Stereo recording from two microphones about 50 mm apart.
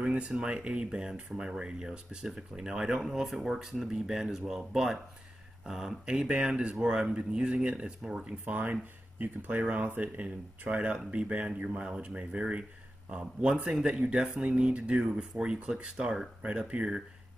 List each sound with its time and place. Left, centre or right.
0.0 s speech: right
6.7 s speech: centre